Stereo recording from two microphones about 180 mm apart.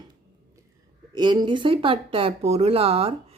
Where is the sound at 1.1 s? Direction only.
25° right (ahead or behind).